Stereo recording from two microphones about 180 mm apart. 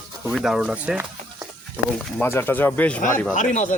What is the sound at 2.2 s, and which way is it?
Speech, 15° left (ahead or behind).